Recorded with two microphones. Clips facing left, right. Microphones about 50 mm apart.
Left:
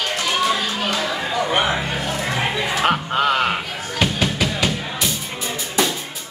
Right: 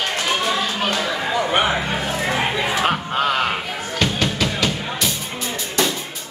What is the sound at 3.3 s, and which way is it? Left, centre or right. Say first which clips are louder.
Music: left 2 dB; centre.